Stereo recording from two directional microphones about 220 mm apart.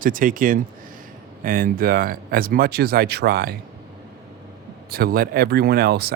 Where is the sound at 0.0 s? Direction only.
40° right (ahead or behind).